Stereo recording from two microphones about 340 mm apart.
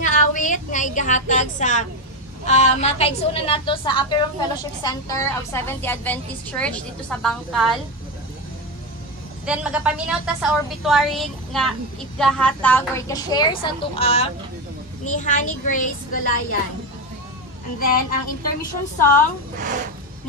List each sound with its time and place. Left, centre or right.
0.0 s a woman's voice: left; by 7.8 s centre
9.5 s a woman's voice: centre; by 16.3 s left
17.7 s a child's voice: left
19.6 s speech: right